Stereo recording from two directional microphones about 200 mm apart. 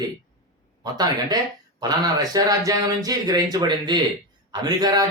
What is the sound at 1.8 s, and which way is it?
Speech, 20° right (ahead or behind).